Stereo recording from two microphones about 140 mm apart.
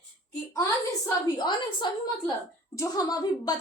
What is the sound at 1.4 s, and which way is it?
A woman's voice, 30° left (ahead or behind).